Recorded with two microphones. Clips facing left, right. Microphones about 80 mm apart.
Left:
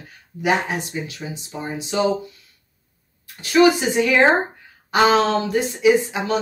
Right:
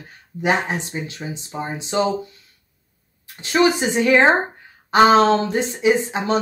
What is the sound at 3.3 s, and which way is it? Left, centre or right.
Speech, right.